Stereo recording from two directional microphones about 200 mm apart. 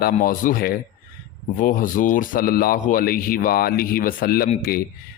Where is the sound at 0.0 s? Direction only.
45° left (ahead or behind).